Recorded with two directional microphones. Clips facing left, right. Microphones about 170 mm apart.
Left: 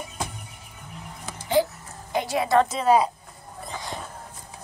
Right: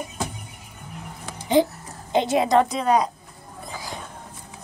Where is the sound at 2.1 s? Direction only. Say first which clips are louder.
Right 3 dB; 20° right (ahead or behind).